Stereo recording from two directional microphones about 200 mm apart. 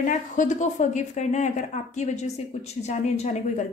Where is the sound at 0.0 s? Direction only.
40° left (ahead or behind).